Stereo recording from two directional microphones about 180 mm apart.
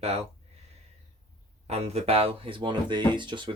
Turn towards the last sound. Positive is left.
turn(degrees=-25)  # may be behind; listen again after turning